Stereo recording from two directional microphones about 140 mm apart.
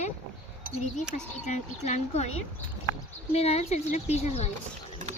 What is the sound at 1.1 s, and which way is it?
Speech, 60° left (ahead or behind).